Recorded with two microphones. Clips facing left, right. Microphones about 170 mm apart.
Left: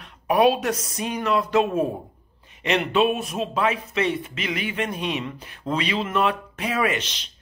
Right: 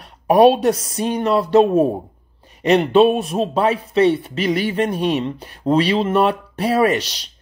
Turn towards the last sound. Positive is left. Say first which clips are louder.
# right 7 dB
turn(degrees=-35)  # may be behind; listen again after turning